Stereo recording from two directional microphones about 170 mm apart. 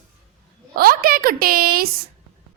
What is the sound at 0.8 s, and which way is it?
A woman's voice, 60° right (ahead or behind).